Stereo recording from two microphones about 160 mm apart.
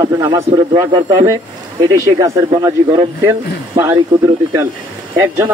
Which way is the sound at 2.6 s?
20° right (ahead or behind).